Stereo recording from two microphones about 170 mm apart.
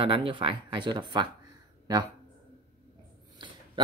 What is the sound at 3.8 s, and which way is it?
Speech, 30° right (ahead or behind).